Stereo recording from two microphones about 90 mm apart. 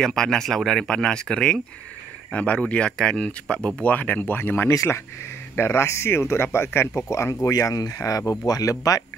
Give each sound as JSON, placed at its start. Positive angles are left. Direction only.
{"t": 0.0, "sound": "speech", "side_deg": 5}
{"t": 7.5, "sound": "speech", "side_deg": 45}